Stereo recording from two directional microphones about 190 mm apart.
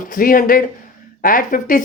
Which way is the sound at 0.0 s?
50° left (ahead or behind).